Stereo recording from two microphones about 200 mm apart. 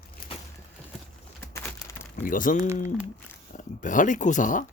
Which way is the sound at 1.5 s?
15° left (ahead or behind).